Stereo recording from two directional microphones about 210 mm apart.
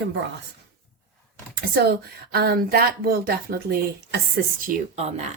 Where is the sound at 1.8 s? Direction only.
50° right (ahead or behind).